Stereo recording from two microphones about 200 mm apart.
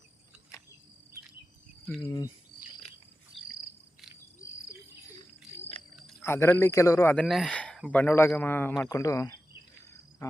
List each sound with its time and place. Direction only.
2.0 s speech: 20° left (ahead or behind)
6.2 s a man's voice: 10° left (ahead or behind)